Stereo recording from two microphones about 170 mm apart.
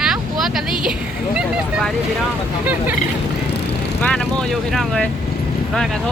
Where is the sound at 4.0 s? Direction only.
5° left (ahead or behind).